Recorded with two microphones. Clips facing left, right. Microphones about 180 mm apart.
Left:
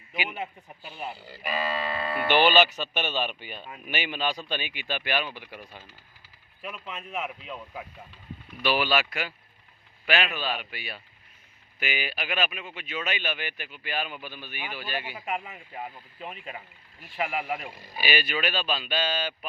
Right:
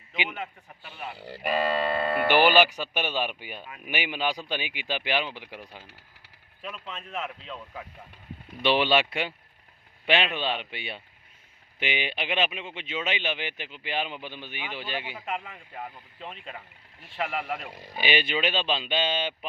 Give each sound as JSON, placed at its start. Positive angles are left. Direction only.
{"t": 0.3, "sound": "speech", "side_deg": 15}
{"t": 1.1, "sound": "speech", "side_deg": -70}
{"t": 2.2, "sound": "speech", "side_deg": -15}
{"t": 6.6, "sound": "speech", "side_deg": 5}
{"t": 8.6, "sound": "speech", "side_deg": -25}
{"t": 15.1, "sound": "speech", "side_deg": 10}
{"t": 17.9, "sound": "speech", "side_deg": -20}